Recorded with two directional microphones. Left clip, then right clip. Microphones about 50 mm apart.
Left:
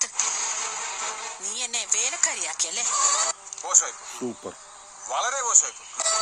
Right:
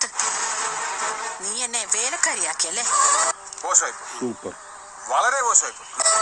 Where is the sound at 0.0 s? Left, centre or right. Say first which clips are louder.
Right 3 dB; right.